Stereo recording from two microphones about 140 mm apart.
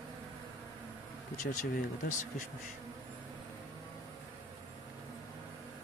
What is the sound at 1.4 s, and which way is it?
Speech, 65° left (ahead or behind).